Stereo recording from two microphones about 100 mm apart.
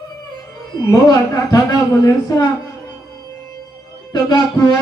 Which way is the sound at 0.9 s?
35° left (ahead or behind).